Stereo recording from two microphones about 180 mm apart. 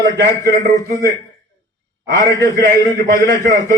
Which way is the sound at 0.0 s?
15° left (ahead or behind).